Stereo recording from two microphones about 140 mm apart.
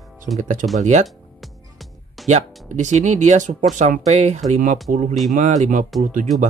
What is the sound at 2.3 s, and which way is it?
Speech, 55° right (ahead or behind).